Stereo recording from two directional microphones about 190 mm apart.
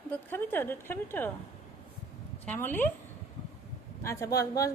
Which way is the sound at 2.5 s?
10° left (ahead or behind).